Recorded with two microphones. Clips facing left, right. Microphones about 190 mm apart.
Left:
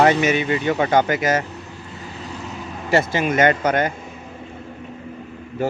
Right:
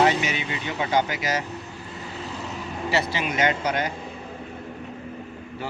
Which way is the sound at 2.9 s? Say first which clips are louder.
Left 8 dB; 50° left (ahead or behind).